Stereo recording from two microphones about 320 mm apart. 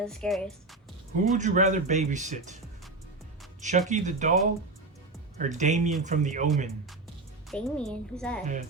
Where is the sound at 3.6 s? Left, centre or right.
Right.